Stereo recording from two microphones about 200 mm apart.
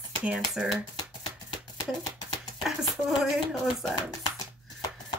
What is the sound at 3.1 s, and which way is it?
Speech, centre (ahead or behind).